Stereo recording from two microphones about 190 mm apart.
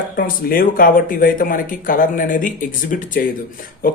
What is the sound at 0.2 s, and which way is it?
Speech, 50° left (ahead or behind).